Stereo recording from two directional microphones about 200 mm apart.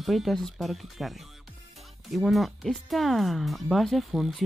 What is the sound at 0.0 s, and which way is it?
Speech, centre (ahead or behind).